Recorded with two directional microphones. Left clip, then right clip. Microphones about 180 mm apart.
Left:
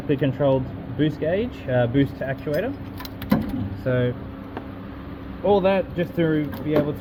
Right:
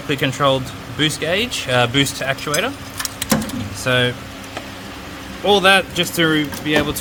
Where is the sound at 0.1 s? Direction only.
20° right (ahead or behind).